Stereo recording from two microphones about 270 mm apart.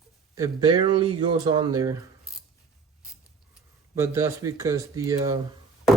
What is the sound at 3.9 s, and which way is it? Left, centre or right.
Speech, centre.